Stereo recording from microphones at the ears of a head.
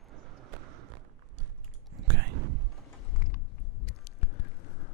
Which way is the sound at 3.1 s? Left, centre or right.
Left.